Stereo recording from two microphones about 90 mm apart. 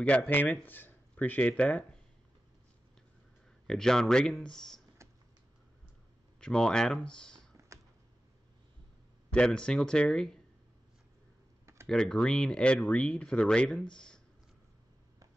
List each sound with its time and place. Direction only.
0.3 s speech: 20° left (ahead or behind)
3.6 s speech: 5° left (ahead or behind)
6.4 s speech: 10° left (ahead or behind)
7.7 s a sound: 35° right (ahead or behind)
9.3 s speech: 10° left (ahead or behind)
11.9 s speech: 10° left (ahead or behind)